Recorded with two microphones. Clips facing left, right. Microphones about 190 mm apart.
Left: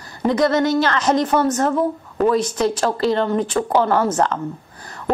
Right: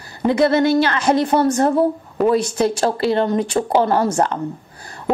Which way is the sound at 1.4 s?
35° right (ahead or behind).